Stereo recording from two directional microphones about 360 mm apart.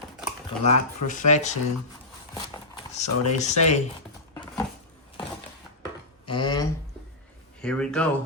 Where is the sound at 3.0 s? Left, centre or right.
Centre.